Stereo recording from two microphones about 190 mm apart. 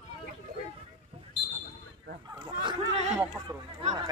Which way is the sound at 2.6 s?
35° right (ahead or behind).